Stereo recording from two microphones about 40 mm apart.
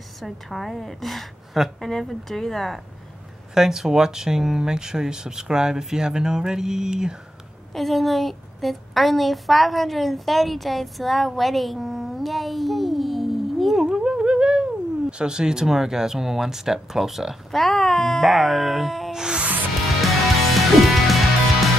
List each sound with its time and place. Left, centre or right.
0.2 s a woman's voice: centre
1.8 s a woman's voice: centre
3.5 s speech: centre
7.7 s a woman's voice: centre
13.8 s a sound: centre
15.6 s speech: centre
17.5 s speech: centre
19.1 s music: centre
19.7 s music: centre